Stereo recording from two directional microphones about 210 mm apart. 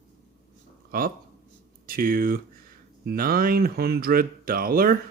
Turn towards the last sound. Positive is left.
turn(degrees=-45)  # may be behind; listen again after turning